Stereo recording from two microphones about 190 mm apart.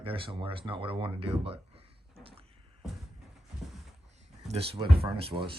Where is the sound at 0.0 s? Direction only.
30° right (ahead or behind).